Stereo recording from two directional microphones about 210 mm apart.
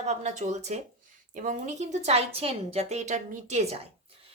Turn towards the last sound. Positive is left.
turn(degrees=-30)  # may be behind; listen again after turning